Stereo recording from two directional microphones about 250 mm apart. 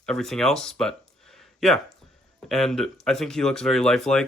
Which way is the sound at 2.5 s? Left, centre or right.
Centre.